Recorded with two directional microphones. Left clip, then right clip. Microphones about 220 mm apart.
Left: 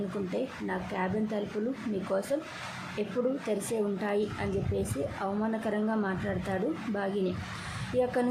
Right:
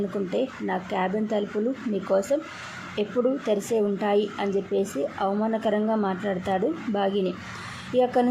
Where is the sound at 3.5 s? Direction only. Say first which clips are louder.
Right 7 dB; 20° right (ahead or behind).